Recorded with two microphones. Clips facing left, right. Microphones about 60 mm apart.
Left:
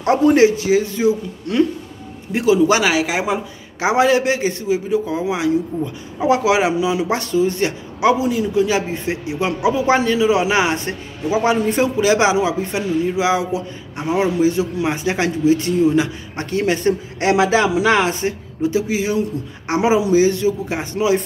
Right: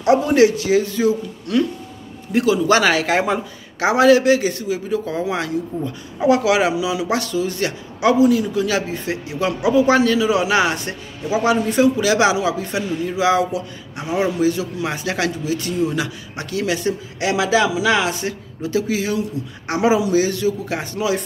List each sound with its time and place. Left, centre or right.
0.0 s speech: left
0.5 s speech: left
3.8 s speech: left
4.8 s speech: centre
6.2 s speech: left